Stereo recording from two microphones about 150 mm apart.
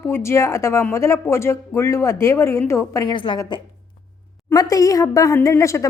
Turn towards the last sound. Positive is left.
turn(degrees=20)  # may be behind; listen again after turning